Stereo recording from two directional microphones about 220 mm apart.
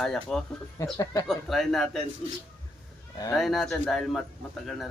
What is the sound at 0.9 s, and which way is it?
Speech, 15° left (ahead or behind).